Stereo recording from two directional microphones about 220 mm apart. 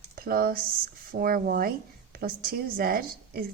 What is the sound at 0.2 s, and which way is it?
A woman's voice, 40° right (ahead or behind).